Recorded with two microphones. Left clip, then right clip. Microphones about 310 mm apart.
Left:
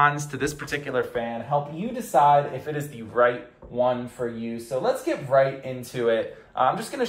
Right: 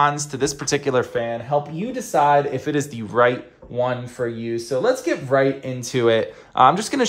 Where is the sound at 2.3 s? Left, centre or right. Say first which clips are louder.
Right 2 dB; right.